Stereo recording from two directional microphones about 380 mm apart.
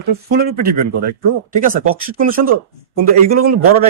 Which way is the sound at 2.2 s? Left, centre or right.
Right.